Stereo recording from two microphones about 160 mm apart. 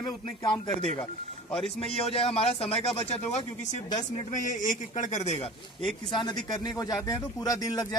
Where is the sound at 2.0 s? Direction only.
40° left (ahead or behind).